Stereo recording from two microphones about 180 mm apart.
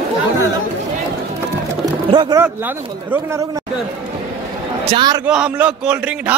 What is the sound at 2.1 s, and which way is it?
Speech, 25° right (ahead or behind).